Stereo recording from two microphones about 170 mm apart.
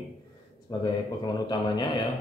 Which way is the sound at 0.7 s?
25° left (ahead or behind).